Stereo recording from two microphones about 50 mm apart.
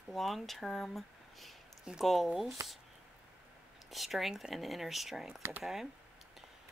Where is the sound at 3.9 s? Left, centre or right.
Centre.